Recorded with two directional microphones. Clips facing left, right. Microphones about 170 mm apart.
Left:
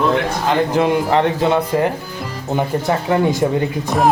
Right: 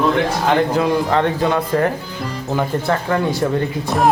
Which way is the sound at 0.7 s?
20° left (ahead or behind).